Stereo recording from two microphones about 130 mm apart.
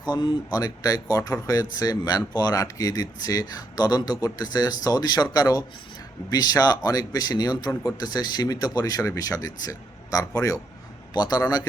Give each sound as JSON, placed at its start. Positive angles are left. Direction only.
{"t": 0.0, "sound": "speech", "side_deg": 35}